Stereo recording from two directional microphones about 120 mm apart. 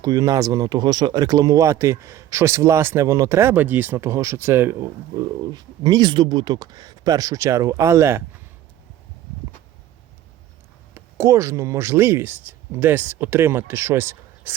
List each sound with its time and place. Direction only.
0.0 s speech: 30° right (ahead or behind)
5.1 s speech: 35° right (ahead or behind)
10.9 s speech: 25° right (ahead or behind)